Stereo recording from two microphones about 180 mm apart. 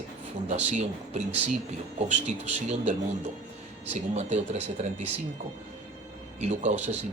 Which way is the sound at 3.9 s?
40° right (ahead or behind).